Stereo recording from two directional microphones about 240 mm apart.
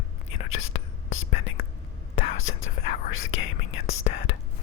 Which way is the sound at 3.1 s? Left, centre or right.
Left.